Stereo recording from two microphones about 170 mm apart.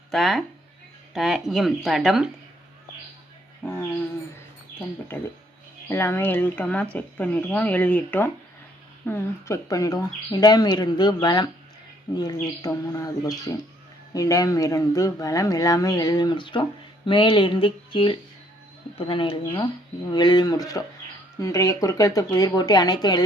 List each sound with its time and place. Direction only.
0.1 s speech: centre (ahead or behind)
5.9 s speech: 15° left (ahead or behind)